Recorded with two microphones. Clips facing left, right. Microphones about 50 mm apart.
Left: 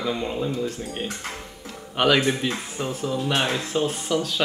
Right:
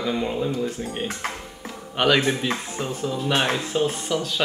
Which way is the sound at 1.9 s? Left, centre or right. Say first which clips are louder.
Even; centre.